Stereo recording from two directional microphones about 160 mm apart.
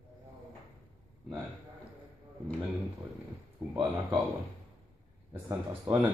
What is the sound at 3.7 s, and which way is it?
Speech, 25° right (ahead or behind).